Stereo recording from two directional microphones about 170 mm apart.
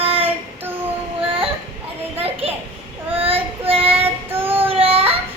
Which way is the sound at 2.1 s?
35° right (ahead or behind).